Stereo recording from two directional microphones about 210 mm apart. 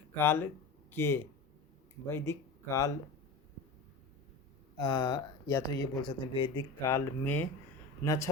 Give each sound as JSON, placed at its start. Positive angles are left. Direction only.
{"t": 0.2, "sound": "speech", "side_deg": 10}
{"t": 4.8, "sound": "speech", "side_deg": 20}